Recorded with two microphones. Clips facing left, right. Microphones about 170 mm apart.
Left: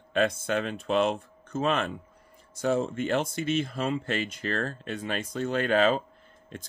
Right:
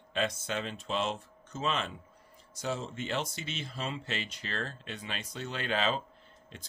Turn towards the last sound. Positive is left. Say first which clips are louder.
# left 8 dB
turn(degrees=50)  # may be behind; listen again after turning